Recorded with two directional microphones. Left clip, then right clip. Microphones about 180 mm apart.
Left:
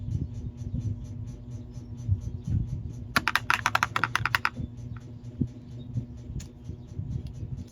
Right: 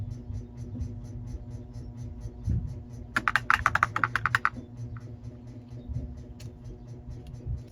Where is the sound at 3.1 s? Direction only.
75° left (ahead or behind).